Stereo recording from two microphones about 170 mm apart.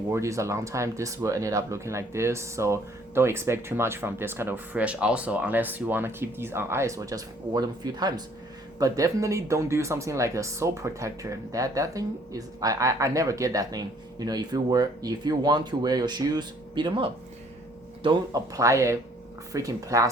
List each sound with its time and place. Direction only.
0.1 s speech: 15° right (ahead or behind)